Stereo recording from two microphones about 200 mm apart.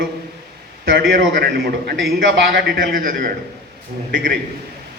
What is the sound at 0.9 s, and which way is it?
A man's voice, 55° right (ahead or behind).